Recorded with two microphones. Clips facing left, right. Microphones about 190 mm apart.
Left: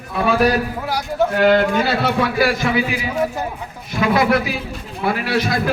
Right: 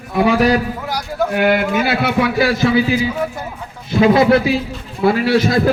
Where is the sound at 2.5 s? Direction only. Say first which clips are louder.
Right 5 dB; 30° right (ahead or behind).